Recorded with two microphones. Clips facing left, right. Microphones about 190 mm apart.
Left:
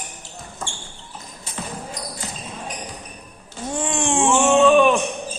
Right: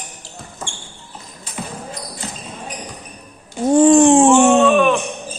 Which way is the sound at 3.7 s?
35° right (ahead or behind).